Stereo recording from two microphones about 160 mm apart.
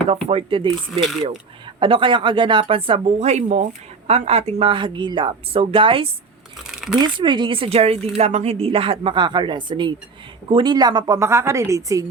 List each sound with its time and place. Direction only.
0.3 s a woman's voice: 35° right (ahead or behind); by 12.0 s 20° right (ahead or behind)